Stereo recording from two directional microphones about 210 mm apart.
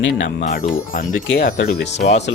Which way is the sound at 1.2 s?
55° left (ahead or behind).